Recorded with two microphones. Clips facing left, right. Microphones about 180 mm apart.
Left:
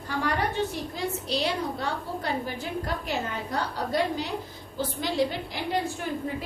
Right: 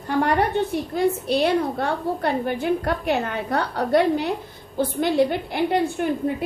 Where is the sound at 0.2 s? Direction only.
55° right (ahead or behind).